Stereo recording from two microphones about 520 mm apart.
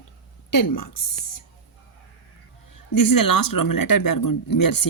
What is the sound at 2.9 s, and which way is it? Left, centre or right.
Speech, left.